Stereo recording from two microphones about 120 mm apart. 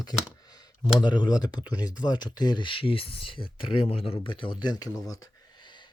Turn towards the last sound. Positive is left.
turn(degrees=40)  # may be behind; listen again after turning